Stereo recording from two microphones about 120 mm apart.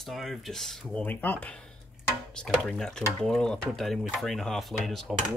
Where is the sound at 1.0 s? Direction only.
15° left (ahead or behind).